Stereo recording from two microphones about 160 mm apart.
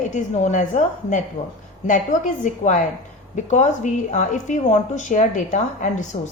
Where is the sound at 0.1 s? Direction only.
50° left (ahead or behind).